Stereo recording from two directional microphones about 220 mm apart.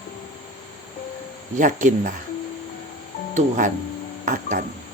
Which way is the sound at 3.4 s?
35° right (ahead or behind).